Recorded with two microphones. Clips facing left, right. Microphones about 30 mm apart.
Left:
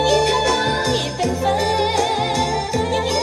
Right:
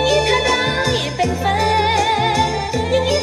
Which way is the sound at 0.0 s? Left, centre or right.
Right.